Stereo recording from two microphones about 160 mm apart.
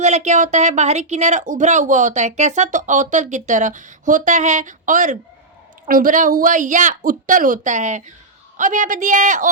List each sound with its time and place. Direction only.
0.0 s speech: 45° right (ahead or behind)